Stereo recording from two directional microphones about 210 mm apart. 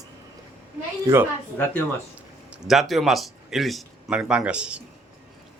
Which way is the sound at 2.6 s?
Centre (ahead or behind).